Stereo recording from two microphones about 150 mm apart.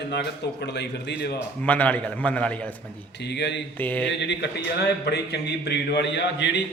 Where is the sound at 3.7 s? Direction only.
10° left (ahead or behind).